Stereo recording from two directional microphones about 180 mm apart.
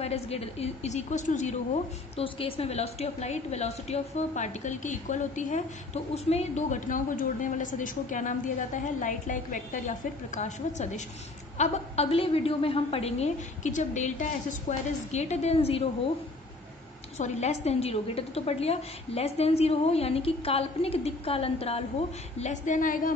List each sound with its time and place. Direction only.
0.0 s a woman's voice: 35° left (ahead or behind)
2.1 s a woman's voice: 30° left (ahead or behind)
17.2 s a woman's voice: 40° left (ahead or behind)